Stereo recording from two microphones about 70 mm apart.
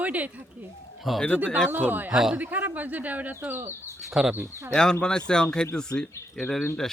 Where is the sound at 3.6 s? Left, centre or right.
Right.